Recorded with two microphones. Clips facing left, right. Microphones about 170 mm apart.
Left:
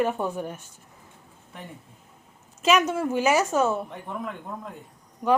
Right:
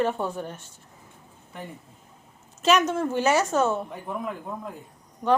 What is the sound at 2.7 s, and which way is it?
A woman's voice, 5° left (ahead or behind).